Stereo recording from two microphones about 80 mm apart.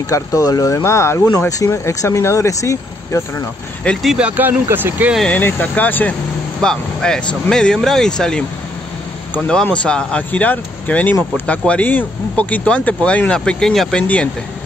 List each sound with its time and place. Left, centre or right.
0.1 s speech: left
0.7 s speech: left
3.9 s speech: centre
4.2 s speech: right
5.4 s speech: left
6.6 s speech: centre
14.0 s speech: centre